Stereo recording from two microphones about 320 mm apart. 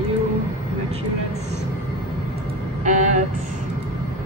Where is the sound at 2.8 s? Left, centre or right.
Right.